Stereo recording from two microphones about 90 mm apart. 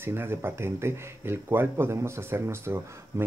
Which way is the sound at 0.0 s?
25° right (ahead or behind).